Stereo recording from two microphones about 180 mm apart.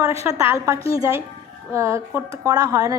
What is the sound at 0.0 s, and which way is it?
A woman's voice, 15° right (ahead or behind).